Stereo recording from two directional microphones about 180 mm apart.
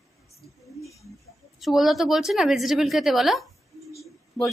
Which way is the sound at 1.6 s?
Centre (ahead or behind).